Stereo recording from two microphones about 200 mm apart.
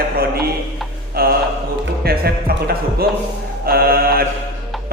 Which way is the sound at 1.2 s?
50° right (ahead or behind).